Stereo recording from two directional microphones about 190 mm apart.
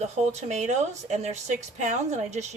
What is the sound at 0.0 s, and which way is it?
A woman's voice, 35° right (ahead or behind).